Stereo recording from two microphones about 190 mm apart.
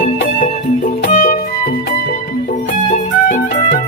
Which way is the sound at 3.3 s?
40° left (ahead or behind).